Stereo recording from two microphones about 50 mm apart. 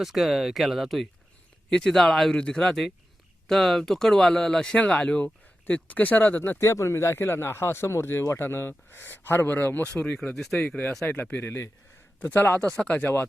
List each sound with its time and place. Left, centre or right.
0.0 s speech: centre
1.7 s speech: centre; by 6.6 s left
6.6 s speech: left
9.9 s speech: left
10.3 s speech: centre
10.6 s speech: left
11.0 s speech: left
11.4 s speech: left
12.5 s speech: left
13.0 s speech: left